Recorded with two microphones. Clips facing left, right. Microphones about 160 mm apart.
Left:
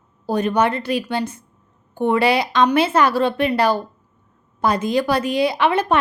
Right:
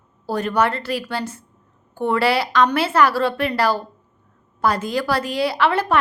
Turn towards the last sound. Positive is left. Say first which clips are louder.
# left 1 dB
turn(degrees=20)  # may be behind; listen again after turning